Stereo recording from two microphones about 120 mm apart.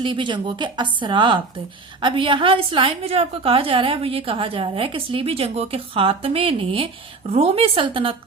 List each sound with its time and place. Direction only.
0.0 s a woman's voice: 45° right (ahead or behind)